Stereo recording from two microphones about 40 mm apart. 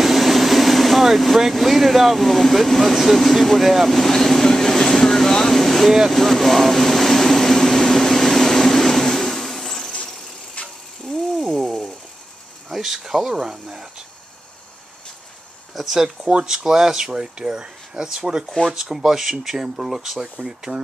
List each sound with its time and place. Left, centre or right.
0.0 s air conditioning: centre
6.1 s vehicle: centre
10.6 s a sound: left
11.5 s a sound: centre
12.6 s speech: centre
15.7 s speech: centre